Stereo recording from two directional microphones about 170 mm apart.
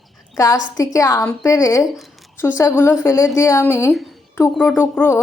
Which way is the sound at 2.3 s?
15° left (ahead or behind).